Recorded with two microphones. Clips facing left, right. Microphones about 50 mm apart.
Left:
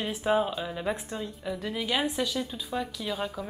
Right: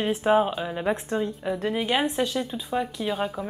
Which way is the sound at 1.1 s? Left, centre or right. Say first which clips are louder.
Right 7 dB; right.